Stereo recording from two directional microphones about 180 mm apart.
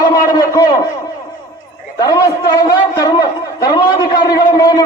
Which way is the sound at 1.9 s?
20° left (ahead or behind).